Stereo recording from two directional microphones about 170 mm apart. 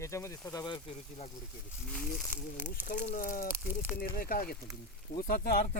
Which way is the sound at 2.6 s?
45° left (ahead or behind).